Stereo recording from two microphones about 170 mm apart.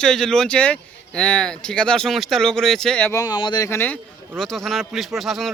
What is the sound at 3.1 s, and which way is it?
Speech, 20° left (ahead or behind).